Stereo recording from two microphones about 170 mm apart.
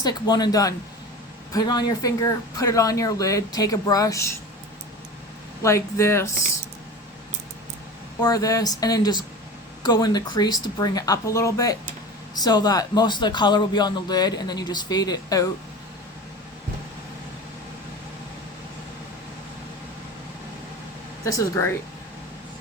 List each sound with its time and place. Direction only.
0.0 s a man's voice: 25° left (ahead or behind)
5.6 s speech: 15° left (ahead or behind)
8.2 s a man's voice: 20° left (ahead or behind)
21.2 s a man's voice: 20° left (ahead or behind)